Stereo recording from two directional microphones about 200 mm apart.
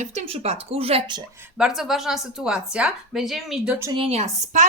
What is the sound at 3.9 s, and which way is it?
Speech, 30° right (ahead or behind).